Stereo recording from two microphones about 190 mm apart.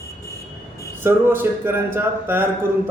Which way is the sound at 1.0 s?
10° right (ahead or behind).